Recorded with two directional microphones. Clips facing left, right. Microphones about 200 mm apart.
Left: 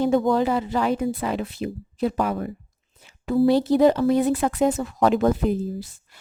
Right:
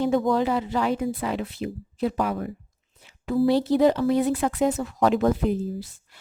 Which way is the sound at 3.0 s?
45° left (ahead or behind).